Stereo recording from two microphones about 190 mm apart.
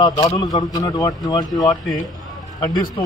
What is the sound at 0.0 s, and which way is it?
A man's voice, 20° left (ahead or behind).